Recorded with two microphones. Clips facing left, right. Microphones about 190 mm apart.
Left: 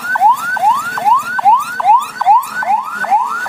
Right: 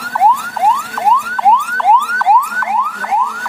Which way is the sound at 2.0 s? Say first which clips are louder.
Left 1 dB; 20° left (ahead or behind).